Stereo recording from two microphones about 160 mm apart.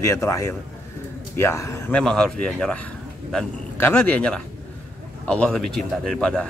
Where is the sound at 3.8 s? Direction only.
10° left (ahead or behind).